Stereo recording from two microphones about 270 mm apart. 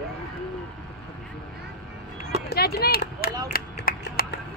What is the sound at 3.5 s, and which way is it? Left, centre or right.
Finger snapping, left.